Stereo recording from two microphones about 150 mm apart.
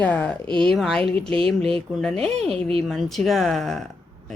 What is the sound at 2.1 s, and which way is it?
Speech, 40° right (ahead or behind).